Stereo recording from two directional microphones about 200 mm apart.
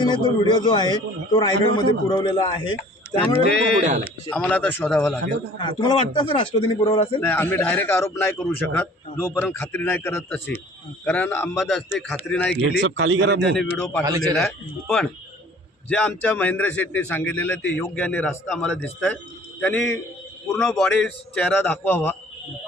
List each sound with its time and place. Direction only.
0.0 s a man's voice: 20° left (ahead or behind)
3.8 s speech: 35° right (ahead or behind)
4.3 s a man's voice: 5° left (ahead or behind)
5.5 s a man's voice: 25° left (ahead or behind)
7.2 s a man's voice: 10° left (ahead or behind)
8.4 s a man's voice: centre (ahead or behind)
9.1 s a man's voice: 10° left (ahead or behind)
12.8 s a man's voice: 70° right (ahead or behind)
13.6 s a man's voice: 5° left (ahead or behind)